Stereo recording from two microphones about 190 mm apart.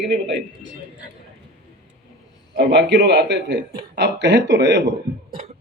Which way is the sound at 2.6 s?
65° right (ahead or behind).